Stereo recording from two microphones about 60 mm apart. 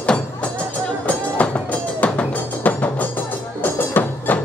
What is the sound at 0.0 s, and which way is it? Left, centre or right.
Music, centre.